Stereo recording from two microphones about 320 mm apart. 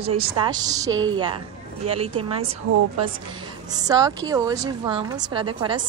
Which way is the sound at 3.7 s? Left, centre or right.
Centre.